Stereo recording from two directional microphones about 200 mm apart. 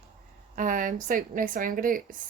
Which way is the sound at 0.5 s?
40° right (ahead or behind).